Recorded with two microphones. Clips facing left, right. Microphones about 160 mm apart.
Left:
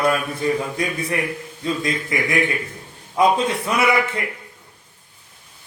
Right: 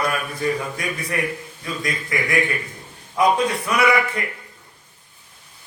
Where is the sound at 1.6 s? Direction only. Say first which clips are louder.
Left 5 dB; 25° left (ahead or behind).